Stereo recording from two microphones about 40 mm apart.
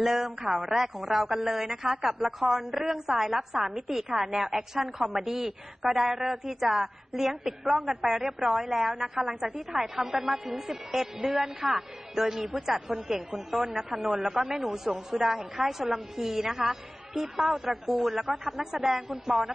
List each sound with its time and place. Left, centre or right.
0.0 s a woman's voice: centre